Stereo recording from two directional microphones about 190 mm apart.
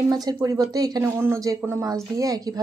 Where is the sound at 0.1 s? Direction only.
20° right (ahead or behind).